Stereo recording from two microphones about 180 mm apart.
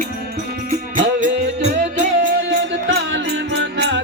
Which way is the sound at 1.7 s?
50° right (ahead or behind).